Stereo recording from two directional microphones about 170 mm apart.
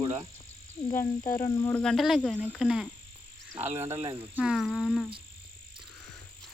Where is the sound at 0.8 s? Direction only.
20° left (ahead or behind); by 2.9 s 5° right (ahead or behind).